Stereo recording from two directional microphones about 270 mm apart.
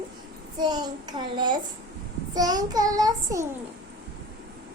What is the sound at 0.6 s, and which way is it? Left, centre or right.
Child singing, centre.